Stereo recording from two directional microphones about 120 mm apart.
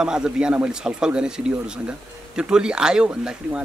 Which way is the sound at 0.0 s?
5° right (ahead or behind).